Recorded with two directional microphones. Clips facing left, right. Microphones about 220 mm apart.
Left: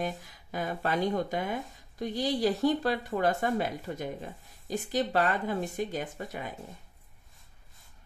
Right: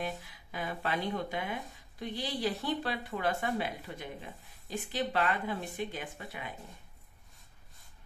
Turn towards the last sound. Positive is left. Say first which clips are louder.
# left 5 dB
turn(degrees=40)  # may be behind; listen again after turning